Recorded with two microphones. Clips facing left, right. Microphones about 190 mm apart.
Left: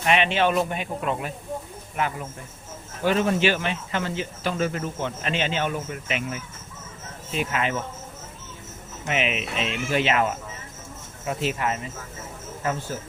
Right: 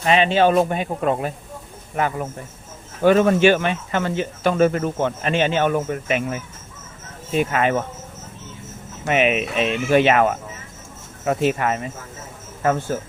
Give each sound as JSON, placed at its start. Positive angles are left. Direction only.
{"t": 0.0, "sound": "speech", "side_deg": -35}
{"t": 9.0, "sound": "speech", "side_deg": -55}